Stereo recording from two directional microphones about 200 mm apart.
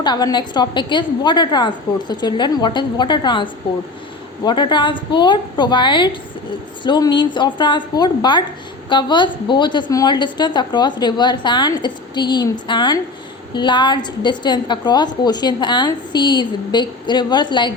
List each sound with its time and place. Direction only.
0.0 s a woman's voice: 20° left (ahead or behind)